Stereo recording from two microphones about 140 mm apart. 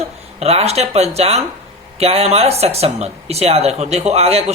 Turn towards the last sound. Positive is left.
turn(degrees=-50)  # may be behind; listen again after turning